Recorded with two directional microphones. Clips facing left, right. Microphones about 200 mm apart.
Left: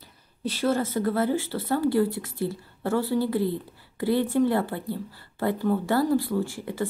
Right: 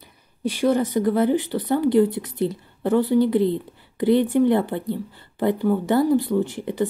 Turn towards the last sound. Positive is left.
turn(degrees=-20)  # may be behind; listen again after turning